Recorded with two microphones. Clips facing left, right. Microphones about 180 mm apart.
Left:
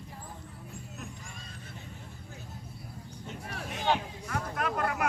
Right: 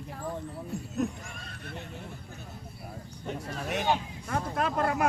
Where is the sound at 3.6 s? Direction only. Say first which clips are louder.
Right 8 dB; 75° right (ahead or behind).